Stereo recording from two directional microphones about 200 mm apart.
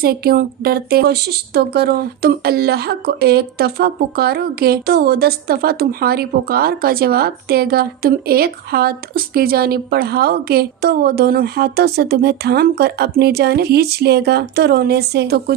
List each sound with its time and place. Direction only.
0.0 s a woman's voice: 50° right (ahead or behind)